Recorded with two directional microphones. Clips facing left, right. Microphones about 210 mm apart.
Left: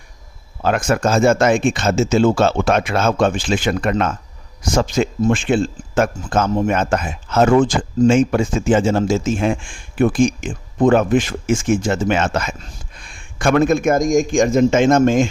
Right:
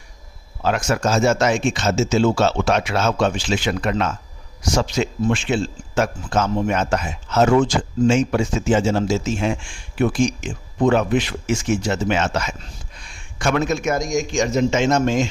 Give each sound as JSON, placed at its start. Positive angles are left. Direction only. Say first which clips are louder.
{"t": 0.6, "sound": "speech", "louder": "left 3 dB", "side_deg": 55}